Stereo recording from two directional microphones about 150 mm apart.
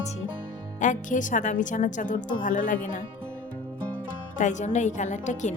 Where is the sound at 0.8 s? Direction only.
55° left (ahead or behind).